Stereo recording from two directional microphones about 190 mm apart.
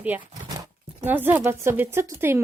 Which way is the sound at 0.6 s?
10° right (ahead or behind).